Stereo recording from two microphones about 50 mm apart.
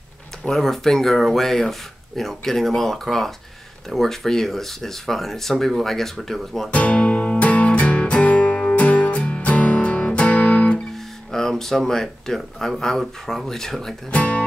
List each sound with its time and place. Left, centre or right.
0.5 s speech: centre
6.7 s music: left
11.3 s speech: centre
14.1 s speech: left